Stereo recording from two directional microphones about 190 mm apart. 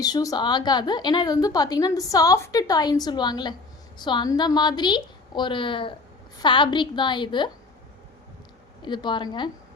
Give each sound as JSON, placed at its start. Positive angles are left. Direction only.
{"t": 0.0, "sound": "a woman's voice", "side_deg": 20}
{"t": 8.8, "sound": "a woman's voice", "side_deg": 25}